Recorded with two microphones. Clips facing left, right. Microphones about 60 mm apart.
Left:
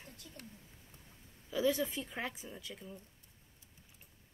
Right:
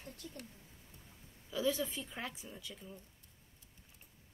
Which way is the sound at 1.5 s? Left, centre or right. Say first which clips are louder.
Left 3 dB; left.